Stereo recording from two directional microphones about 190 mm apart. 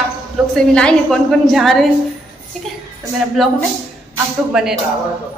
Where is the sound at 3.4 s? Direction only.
Centre (ahead or behind).